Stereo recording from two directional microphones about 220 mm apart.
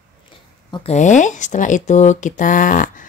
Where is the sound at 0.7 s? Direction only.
30° left (ahead or behind).